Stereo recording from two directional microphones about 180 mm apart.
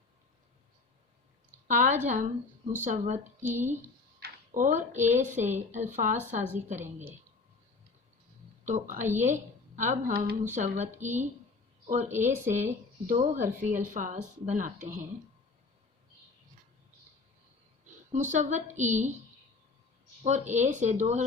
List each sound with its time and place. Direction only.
1.6 s a woman's voice: 45° right (ahead or behind)
4.2 s speech: 45° right (ahead or behind)
8.6 s a woman's voice: 45° right (ahead or behind)
10.4 s a woman's voice: 40° right (ahead or behind)
18.1 s a woman's voice: 40° right (ahead or behind)
20.2 s a woman's voice: 40° right (ahead or behind)